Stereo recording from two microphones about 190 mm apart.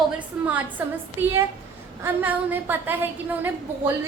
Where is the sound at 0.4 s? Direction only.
10° right (ahead or behind).